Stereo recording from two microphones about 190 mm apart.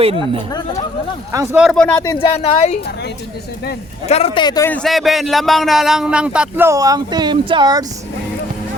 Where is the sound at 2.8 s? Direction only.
60° left (ahead or behind).